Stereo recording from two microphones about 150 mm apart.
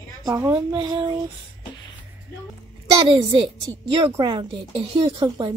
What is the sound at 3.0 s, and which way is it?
Speech, 35° right (ahead or behind).